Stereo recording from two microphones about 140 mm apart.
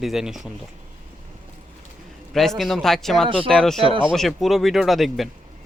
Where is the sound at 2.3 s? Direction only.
Centre (ahead or behind).